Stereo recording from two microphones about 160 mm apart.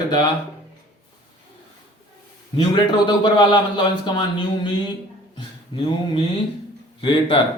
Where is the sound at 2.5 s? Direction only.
30° left (ahead or behind).